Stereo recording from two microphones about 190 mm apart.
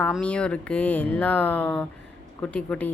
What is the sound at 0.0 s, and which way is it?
A woman's voice, 5° left (ahead or behind).